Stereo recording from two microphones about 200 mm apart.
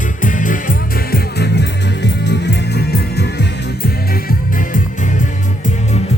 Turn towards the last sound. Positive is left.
turn(degrees=40)  # may be behind; listen again after turning